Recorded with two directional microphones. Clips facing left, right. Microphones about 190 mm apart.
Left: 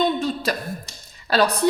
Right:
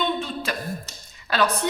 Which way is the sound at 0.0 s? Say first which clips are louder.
Left 5 dB; 40° left (ahead or behind).